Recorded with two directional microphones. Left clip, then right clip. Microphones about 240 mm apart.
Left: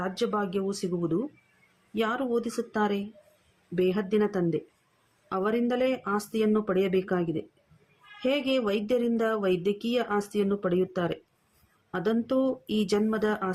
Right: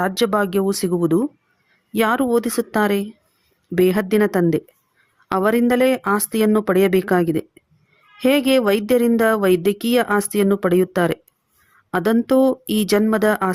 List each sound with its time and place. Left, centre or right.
0.0 s speech: right